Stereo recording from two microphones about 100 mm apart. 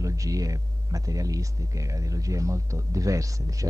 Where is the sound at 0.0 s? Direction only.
35° right (ahead or behind).